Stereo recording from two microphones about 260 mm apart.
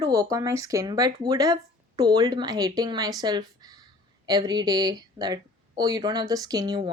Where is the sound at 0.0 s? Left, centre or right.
Centre.